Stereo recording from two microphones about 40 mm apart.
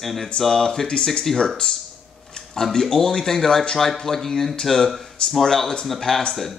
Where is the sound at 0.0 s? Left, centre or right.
Centre.